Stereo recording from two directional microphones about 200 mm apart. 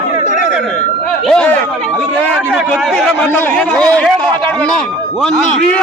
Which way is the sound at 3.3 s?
5° left (ahead or behind).